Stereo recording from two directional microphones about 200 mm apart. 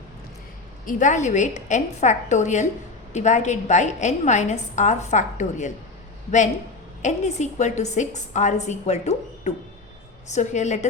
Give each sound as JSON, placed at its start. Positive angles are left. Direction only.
{"t": 0.9, "sound": "a woman's voice", "side_deg": 40}
{"t": 7.0, "sound": "a woman's voice", "side_deg": 35}